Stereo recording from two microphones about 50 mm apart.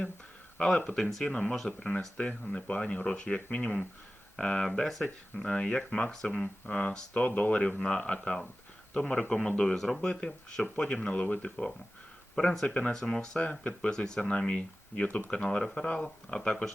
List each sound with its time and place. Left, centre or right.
1.3 s speech: left
1.5 s speech: centre
2.4 s speech: left
4.4 s speech: centre
5.4 s speech: centre
6.1 s speech: centre
6.7 s speech: left
9.6 s speech: centre